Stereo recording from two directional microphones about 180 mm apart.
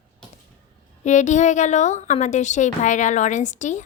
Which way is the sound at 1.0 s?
40° left (ahead or behind).